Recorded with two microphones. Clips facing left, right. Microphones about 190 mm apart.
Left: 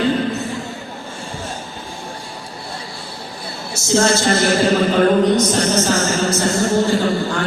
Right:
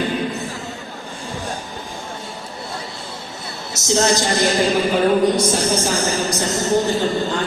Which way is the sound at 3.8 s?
20° right (ahead or behind).